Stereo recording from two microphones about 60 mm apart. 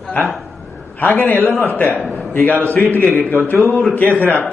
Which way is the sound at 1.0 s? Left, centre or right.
Left.